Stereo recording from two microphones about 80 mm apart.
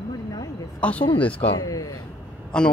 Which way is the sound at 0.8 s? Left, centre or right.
Centre.